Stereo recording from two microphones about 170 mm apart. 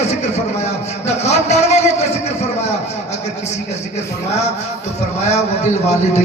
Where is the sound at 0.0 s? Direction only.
40° left (ahead or behind).